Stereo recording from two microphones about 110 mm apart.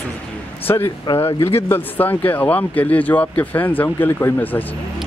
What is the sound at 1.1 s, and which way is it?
Speech, 20° left (ahead or behind).